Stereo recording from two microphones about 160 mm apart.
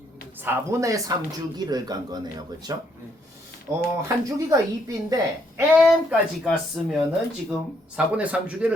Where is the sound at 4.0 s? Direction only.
20° right (ahead or behind).